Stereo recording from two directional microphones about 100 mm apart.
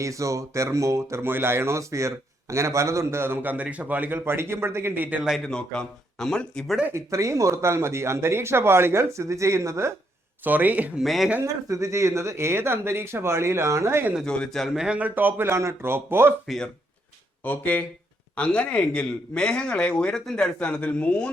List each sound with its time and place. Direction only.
0.0 s speech: 30° right (ahead or behind)
5.5 s speech: 5° left (ahead or behind)
6.9 s speech: 30° right (ahead or behind)
10.4 s speech: 20° right (ahead or behind)
11.0 s speech: centre (ahead or behind)
11.7 s speech: 30° right (ahead or behind)
14.3 s speech: 5° left (ahead or behind); by 16.3 s 25° right (ahead or behind)
17.4 s speech: 15° left (ahead or behind)